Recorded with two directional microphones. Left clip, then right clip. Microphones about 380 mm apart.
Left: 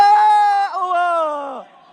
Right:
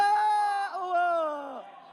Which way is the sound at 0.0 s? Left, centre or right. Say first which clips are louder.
Left 13 dB; centre.